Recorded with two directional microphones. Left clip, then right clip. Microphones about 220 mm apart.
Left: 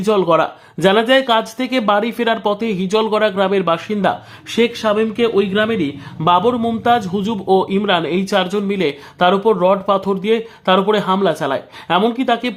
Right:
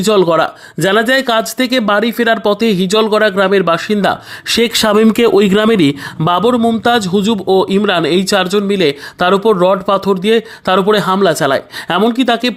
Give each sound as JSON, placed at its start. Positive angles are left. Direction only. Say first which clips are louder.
{"t": 0.0, "sound": "speech", "louder": "right 3 dB", "side_deg": -20}
{"t": 6.2, "sound": "speech", "louder": "right 2 dB", "side_deg": -25}